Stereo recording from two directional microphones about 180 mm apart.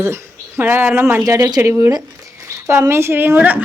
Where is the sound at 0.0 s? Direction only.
15° right (ahead or behind).